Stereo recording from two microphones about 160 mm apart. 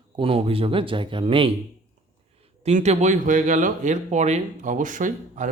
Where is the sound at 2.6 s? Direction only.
45° right (ahead or behind).